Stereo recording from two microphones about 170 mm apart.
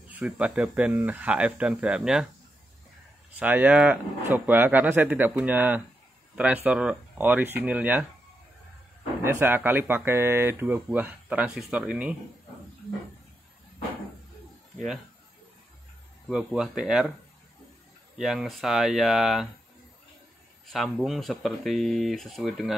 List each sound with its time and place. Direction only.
0.1 s speech: 5° right (ahead or behind)
3.3 s speech: 10° right (ahead or behind)
9.2 s speech: 10° right (ahead or behind)
16.3 s speech: 5° right (ahead or behind)
18.1 s speech: centre (ahead or behind)
20.6 s speech: centre (ahead or behind)